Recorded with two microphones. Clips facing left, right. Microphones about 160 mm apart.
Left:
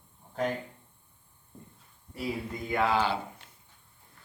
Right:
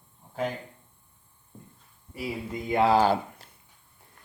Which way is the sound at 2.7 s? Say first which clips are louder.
Right 5 dB; 30° right (ahead or behind).